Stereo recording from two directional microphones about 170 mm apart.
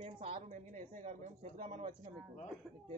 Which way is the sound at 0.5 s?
45° right (ahead or behind).